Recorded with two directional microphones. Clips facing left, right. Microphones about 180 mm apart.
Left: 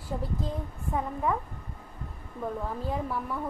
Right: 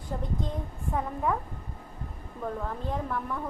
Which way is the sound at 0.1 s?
5° left (ahead or behind).